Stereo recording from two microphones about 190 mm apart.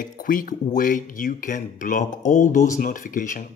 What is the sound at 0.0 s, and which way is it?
Speech, 45° left (ahead or behind).